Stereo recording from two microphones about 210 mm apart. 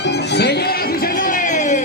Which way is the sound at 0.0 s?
50° left (ahead or behind).